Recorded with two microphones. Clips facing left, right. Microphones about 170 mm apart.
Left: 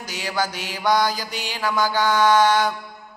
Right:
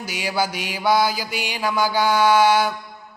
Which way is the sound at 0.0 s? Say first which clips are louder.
Right 2 dB; 10° right (ahead or behind).